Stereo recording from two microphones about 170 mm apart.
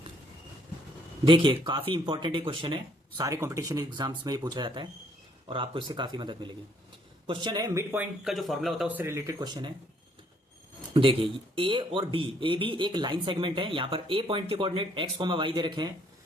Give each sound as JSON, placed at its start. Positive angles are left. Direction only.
{"t": 1.2, "sound": "speech", "side_deg": -30}
{"t": 3.2, "sound": "speech", "side_deg": -20}
{"t": 8.2, "sound": "speech", "side_deg": 0}
{"t": 10.9, "sound": "speech", "side_deg": -30}